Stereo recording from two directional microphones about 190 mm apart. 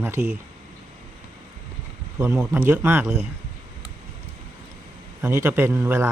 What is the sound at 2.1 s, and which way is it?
A man's voice, 5° right (ahead or behind).